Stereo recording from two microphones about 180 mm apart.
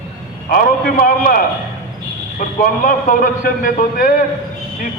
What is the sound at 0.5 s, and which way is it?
Speech, 50° left (ahead or behind).